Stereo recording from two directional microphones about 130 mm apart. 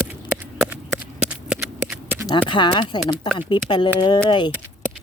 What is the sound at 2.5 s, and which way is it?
Speech, 40° left (ahead or behind).